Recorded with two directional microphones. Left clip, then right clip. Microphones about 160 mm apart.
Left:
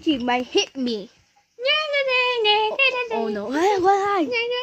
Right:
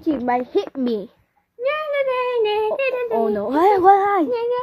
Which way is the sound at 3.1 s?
Centre (ahead or behind).